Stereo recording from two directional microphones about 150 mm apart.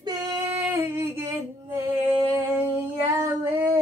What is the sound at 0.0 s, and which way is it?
Female singing, 25° right (ahead or behind).